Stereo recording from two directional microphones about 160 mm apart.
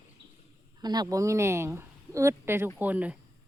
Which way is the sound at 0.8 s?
25° right (ahead or behind).